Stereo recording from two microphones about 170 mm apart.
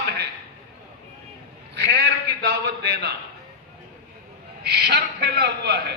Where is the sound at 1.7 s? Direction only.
80° right.